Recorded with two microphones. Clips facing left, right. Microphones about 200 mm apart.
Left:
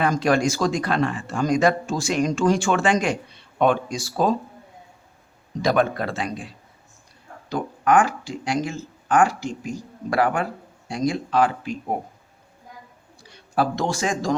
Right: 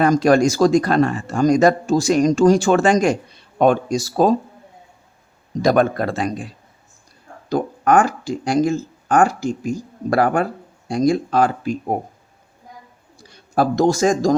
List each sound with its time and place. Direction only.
0.0 s speech: 40° right (ahead or behind)
5.6 s speech: 45° right (ahead or behind)
7.5 s speech: 45° right (ahead or behind)
13.2 s speech: 40° right (ahead or behind)